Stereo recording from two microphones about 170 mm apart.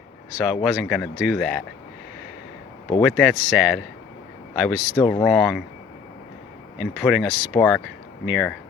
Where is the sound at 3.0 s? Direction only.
Centre (ahead or behind).